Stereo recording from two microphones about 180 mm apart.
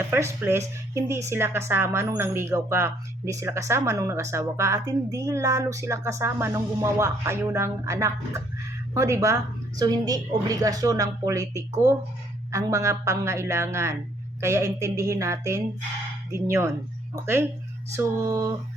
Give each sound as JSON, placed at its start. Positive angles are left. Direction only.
{"t": 0.0, "sound": "a woman's voice", "side_deg": -15}